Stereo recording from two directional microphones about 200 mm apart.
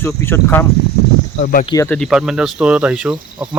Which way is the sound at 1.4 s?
45° left (ahead or behind).